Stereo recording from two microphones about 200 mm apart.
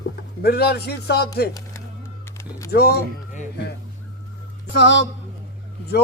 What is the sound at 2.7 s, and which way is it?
Speech, 55° left (ahead or behind).